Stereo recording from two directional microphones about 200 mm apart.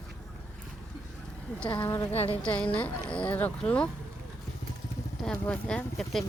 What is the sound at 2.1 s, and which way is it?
Speech, 30° left (ahead or behind).